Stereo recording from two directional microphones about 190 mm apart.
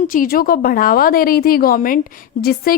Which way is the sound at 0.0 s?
45° left (ahead or behind).